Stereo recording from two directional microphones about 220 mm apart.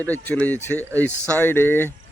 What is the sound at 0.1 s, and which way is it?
Speech, 10° left (ahead or behind).